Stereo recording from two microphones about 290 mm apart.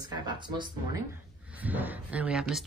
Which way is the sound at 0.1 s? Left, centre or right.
Centre.